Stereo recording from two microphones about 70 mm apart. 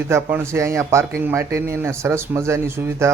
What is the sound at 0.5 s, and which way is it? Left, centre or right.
Speech, right.